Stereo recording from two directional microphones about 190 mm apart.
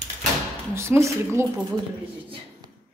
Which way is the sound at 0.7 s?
15° right (ahead or behind).